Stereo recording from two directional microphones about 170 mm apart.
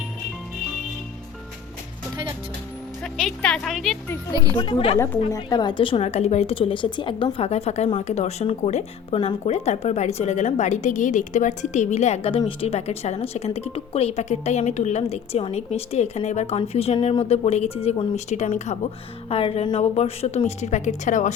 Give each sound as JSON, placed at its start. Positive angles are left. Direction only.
{"t": 3.0, "sound": "speech", "side_deg": 0}
{"t": 4.5, "sound": "a woman's voice", "side_deg": 30}
{"t": 19.3, "sound": "speech", "side_deg": 35}